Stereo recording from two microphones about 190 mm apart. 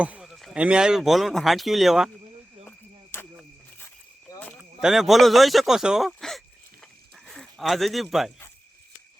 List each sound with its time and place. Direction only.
0.0 s speech: 5° right (ahead or behind)
2.6 s cricket: 10° left (ahead or behind)
4.3 s cricket: 20° left (ahead or behind)
4.8 s speech: centre (ahead or behind)